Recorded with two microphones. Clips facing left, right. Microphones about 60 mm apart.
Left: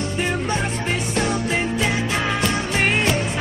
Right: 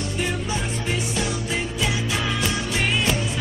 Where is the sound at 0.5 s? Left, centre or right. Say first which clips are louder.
Left 3 dB; left.